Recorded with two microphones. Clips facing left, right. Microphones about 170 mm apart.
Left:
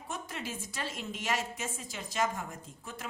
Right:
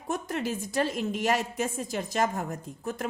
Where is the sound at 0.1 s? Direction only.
45° right (ahead or behind).